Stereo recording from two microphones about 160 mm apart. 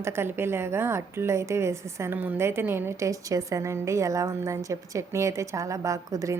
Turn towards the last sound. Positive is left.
turn(degrees=-20)  # may be behind; listen again after turning